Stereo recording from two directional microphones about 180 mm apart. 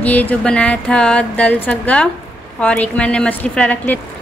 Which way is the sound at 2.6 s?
5° left (ahead or behind).